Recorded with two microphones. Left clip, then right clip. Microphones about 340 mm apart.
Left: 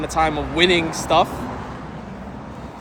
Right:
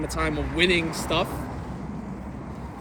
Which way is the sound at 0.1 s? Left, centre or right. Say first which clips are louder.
Left 8 dB; centre.